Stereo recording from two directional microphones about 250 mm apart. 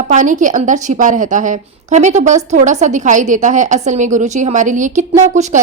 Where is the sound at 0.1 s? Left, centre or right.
Right.